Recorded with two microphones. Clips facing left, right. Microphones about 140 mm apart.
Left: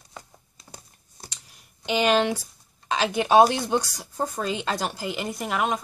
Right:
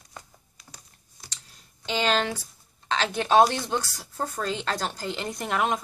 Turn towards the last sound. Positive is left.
turn(degrees=0)  # may be behind; listen again after turning